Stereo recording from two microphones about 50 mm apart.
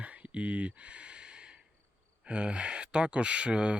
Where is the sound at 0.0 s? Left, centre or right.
Right.